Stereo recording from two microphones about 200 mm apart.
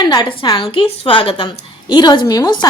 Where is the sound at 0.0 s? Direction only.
25° left (ahead or behind).